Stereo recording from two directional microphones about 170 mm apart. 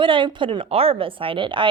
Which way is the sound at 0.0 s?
30° right (ahead or behind).